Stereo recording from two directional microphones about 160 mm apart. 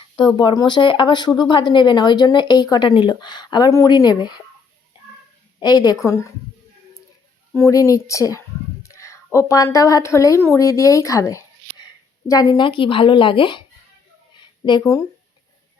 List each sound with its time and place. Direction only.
0.3 s speech: 25° left (ahead or behind)
5.5 s speech: 25° left (ahead or behind)
7.5 s a woman's voice: 20° left (ahead or behind)
14.6 s speech: 25° left (ahead or behind)